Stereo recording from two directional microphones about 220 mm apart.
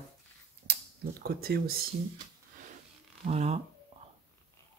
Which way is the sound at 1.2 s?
45° right (ahead or behind).